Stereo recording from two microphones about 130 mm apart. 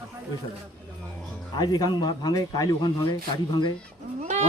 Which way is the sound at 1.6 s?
30° left (ahead or behind).